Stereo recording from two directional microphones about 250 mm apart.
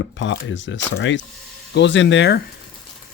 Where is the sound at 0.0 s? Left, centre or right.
Left.